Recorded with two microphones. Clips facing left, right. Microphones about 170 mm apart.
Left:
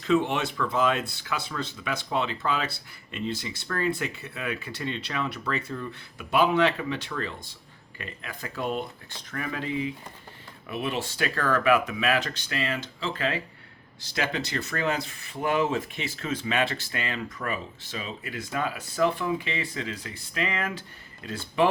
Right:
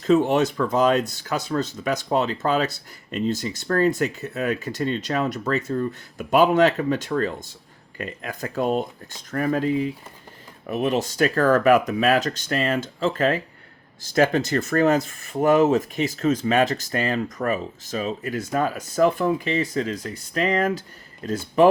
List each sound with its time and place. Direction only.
0.0 s speech: 40° right (ahead or behind)